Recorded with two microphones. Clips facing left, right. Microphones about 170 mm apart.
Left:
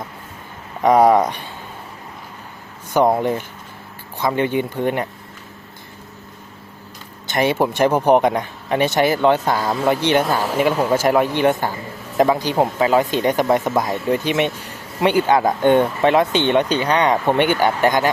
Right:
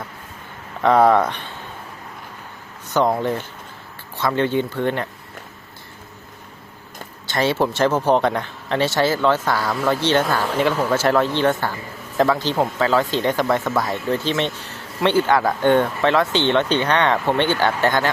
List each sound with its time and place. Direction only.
0.8 s speech: 15° left (ahead or behind)
3.1 s speech: 15° left (ahead or behind)
7.3 s speech: 15° left (ahead or behind)